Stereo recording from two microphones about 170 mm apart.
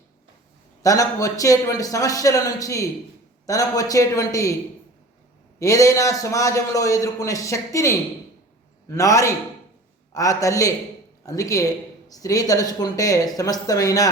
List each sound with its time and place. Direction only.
0.8 s a man's voice: 20° left (ahead or behind)
5.5 s a man's voice: 20° left (ahead or behind)